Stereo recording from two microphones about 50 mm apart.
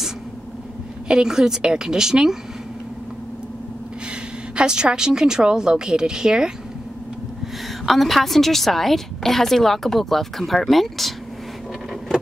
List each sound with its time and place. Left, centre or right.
1.0 s a woman's voice: centre
4.6 s a woman's voice: centre
7.8 s a woman's voice: centre